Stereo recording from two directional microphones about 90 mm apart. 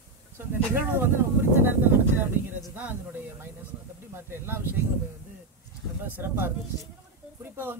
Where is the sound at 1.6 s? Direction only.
20° right (ahead or behind).